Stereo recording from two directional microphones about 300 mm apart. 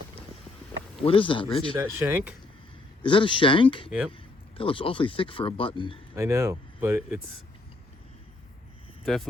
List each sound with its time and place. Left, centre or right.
1.0 s a man's voice: centre
1.7 s speech: centre
3.0 s a man's voice: centre
3.8 s speech: centre
4.5 s a man's voice: centre
6.1 s speech: centre